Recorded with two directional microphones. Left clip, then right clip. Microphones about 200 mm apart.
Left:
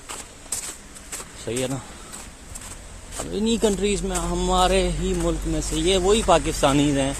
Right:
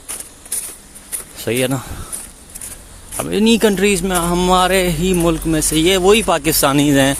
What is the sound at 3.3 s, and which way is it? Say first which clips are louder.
A man's voice: right 8 dB; 50° right (ahead or behind).